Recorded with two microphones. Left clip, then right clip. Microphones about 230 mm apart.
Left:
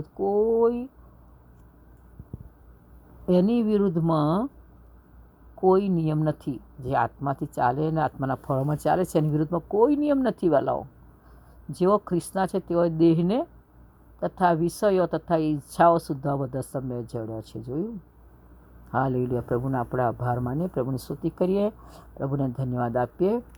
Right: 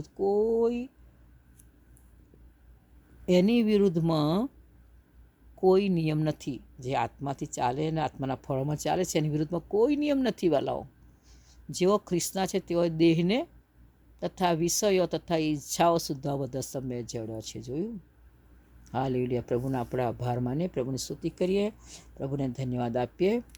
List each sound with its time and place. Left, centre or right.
0.0 s speech: centre
3.2 s speech: centre
5.5 s speech: centre
18.9 s speech: centre